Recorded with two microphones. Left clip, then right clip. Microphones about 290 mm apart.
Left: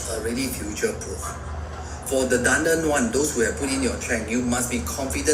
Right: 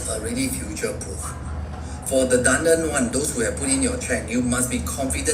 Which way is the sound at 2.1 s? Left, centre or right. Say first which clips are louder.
Right 2 dB; centre.